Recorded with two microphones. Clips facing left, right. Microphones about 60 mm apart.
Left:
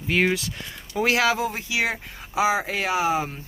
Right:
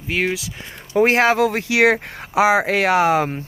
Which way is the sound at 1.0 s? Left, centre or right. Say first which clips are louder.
Right 5 dB; right.